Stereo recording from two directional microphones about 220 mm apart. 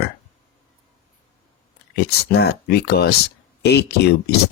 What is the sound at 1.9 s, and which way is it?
Speech, 50° left (ahead or behind).